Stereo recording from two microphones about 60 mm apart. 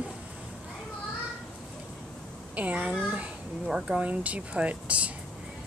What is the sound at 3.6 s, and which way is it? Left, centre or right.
Speech, centre.